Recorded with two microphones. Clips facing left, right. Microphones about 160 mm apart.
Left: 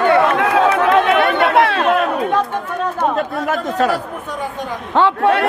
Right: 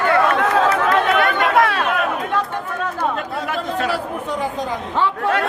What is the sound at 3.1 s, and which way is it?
Speech, 40° left (ahead or behind).